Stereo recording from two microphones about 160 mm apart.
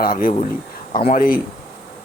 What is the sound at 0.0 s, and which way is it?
Speech, 60° left (ahead or behind).